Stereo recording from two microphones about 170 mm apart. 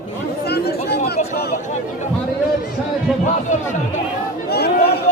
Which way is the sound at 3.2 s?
45° left (ahead or behind).